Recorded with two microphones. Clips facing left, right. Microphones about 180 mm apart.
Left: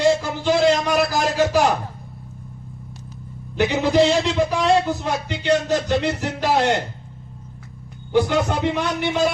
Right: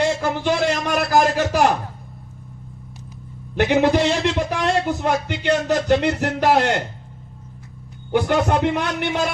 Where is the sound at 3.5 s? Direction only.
55° right (ahead or behind).